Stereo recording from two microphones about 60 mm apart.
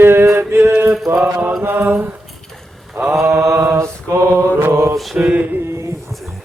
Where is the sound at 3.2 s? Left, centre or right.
Right.